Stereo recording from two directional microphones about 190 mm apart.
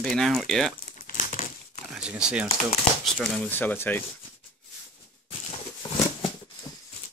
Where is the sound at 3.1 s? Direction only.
10° left (ahead or behind).